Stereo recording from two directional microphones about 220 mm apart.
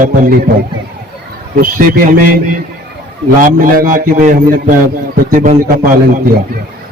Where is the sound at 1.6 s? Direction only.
40° right (ahead or behind).